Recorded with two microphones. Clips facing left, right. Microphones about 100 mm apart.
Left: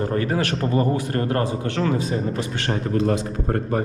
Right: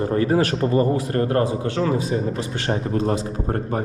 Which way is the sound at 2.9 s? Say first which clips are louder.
Left 1 dB; 30° right (ahead or behind).